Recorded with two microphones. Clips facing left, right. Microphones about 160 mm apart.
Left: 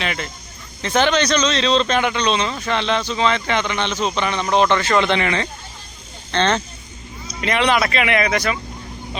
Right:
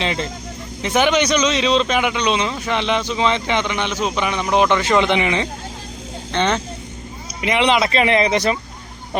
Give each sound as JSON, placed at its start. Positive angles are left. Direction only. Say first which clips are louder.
{"t": 0.0, "sound": "speech", "louder": "right 3 dB", "side_deg": -25}
{"t": 0.8, "sound": "speech", "louder": "right 1 dB", "side_deg": -15}